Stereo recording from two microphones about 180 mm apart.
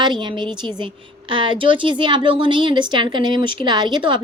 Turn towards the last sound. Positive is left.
turn(degrees=-25)  # may be behind; listen again after turning